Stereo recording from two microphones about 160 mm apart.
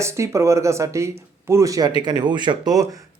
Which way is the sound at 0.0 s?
20° right (ahead or behind).